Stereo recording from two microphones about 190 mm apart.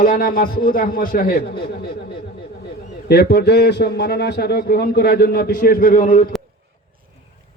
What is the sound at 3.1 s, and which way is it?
A man's voice, 55° left (ahead or behind).